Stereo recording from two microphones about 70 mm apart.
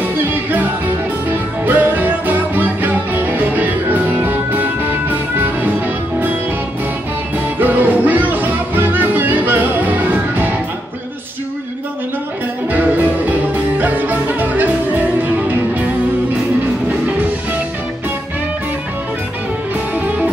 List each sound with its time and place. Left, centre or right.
0.0 s music: right
7.6 s music: right
12.6 s music: right